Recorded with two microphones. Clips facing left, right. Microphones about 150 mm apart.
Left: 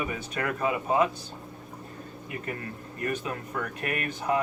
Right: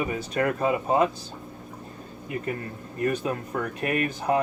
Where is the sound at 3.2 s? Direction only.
40° right (ahead or behind).